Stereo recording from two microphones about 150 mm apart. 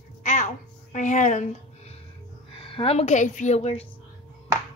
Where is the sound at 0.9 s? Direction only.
55° left (ahead or behind).